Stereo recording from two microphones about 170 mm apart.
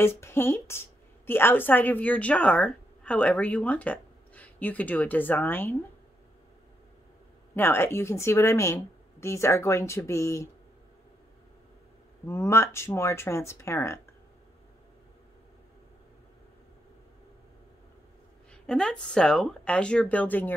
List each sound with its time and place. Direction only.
0.0 s a woman's voice: 15° left (ahead or behind)
7.5 s a woman's voice: 15° left (ahead or behind)
12.3 s a woman's voice: 15° left (ahead or behind)
18.5 s speech: 5° left (ahead or behind)